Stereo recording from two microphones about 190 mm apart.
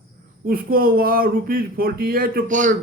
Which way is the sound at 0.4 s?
50° right (ahead or behind).